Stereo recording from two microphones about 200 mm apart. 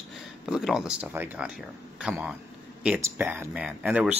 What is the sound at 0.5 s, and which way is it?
Speech, 5° right (ahead or behind).